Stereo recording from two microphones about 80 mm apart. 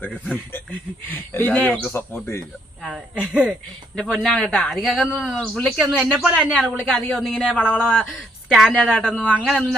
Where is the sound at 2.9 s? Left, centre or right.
Centre.